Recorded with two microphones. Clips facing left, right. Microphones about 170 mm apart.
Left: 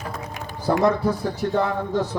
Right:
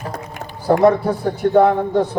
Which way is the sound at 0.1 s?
55° right (ahead or behind).